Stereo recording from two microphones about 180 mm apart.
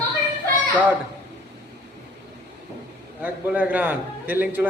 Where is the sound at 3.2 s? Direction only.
10° right (ahead or behind).